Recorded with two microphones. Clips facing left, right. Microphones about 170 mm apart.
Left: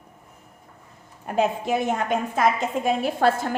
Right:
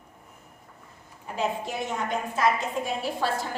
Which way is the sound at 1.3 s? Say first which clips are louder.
Left 7 dB; 55° left (ahead or behind).